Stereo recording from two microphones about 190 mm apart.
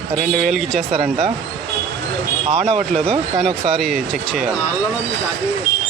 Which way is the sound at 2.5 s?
35° right (ahead or behind).